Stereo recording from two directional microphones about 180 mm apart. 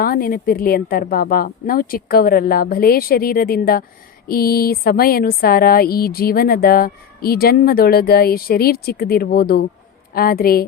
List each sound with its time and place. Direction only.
0.0 s speech: 55° left (ahead or behind)